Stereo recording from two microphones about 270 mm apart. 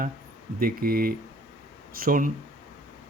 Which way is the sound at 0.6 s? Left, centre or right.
Right.